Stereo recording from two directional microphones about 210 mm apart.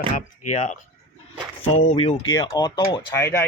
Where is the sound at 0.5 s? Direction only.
35° left (ahead or behind).